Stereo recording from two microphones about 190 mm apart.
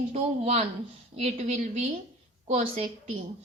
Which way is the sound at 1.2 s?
35° right (ahead or behind).